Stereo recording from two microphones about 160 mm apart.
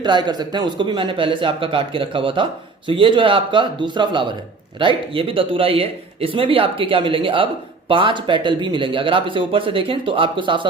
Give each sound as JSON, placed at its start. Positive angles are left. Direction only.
{"t": 0.0, "sound": "a man's voice", "side_deg": -25}